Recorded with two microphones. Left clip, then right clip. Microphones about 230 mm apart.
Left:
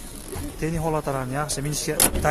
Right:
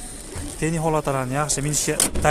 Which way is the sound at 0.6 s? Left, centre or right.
Centre.